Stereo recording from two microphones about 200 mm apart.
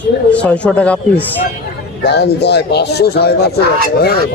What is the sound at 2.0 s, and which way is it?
Speech, 55° left (ahead or behind).